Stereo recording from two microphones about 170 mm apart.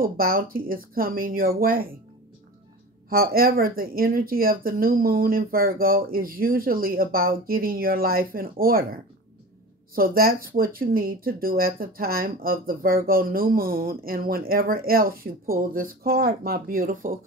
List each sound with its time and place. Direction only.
0.0 s speech: 60° right (ahead or behind)
3.1 s speech: 60° right (ahead or behind)
9.9 s speech: 60° right (ahead or behind)